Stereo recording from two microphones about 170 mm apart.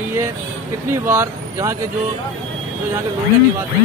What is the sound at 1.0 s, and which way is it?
Speech, 15° right (ahead or behind).